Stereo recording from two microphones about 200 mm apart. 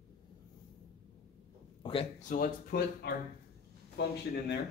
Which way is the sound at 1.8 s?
30° left (ahead or behind).